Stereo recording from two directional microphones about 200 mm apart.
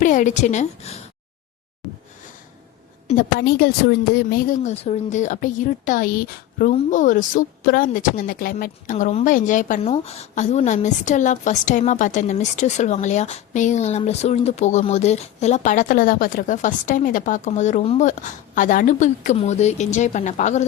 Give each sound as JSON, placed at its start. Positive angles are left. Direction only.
{"t": 0.0, "sound": "a woman's voice", "side_deg": 40}
{"t": 3.3, "sound": "speech", "side_deg": 55}